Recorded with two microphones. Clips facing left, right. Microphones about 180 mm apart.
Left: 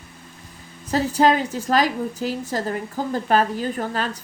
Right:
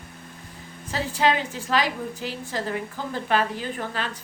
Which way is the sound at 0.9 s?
40° left (ahead or behind).